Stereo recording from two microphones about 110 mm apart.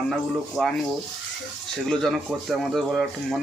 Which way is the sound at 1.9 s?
Centre (ahead or behind).